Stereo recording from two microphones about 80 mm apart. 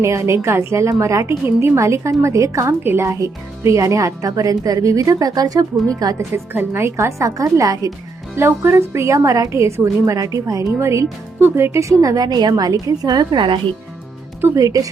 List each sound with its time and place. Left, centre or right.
0.0 s a woman's voice: right
2.8 s speech: right
3.1 s speech: right
6.1 s a woman's voice: right
8.4 s a woman's voice: right
14.5 s speech: right